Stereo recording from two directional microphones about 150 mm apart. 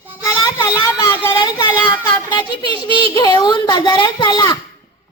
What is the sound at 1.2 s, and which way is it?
A child's voice, 20° left (ahead or behind).